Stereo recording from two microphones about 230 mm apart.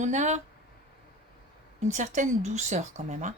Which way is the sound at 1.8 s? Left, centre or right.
Right.